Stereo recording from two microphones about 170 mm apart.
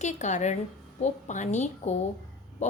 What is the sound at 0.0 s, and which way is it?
A woman's voice, 45° left (ahead or behind).